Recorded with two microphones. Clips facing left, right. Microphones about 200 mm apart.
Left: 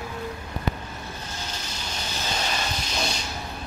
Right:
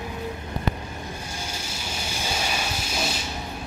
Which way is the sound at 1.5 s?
10° right (ahead or behind).